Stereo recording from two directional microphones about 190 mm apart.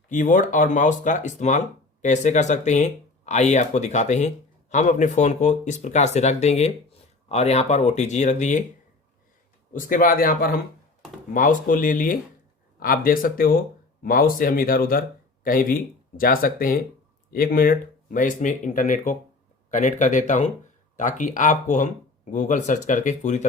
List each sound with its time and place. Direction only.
0.1 s speech: 45° left (ahead or behind)
9.7 s speech: 45° left (ahead or behind)